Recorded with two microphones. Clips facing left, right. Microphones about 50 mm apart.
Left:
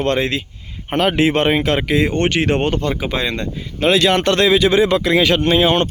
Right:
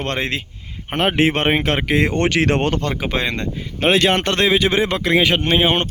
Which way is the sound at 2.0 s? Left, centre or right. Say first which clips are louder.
Even; right.